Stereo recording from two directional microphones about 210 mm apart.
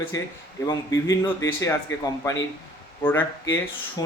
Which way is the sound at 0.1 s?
15° left (ahead or behind).